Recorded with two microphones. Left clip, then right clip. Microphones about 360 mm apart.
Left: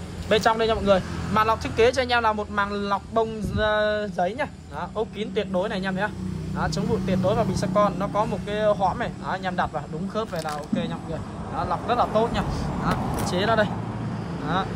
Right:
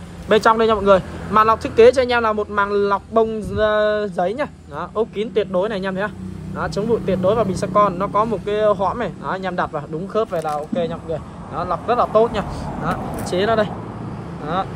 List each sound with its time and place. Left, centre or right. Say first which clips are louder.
0.3 s speech: right 6 dB; centre
8.7 s speech: right 3 dB; right
9.0 s speech: right 4 dB; centre
11.5 s speech: right 5 dB; centre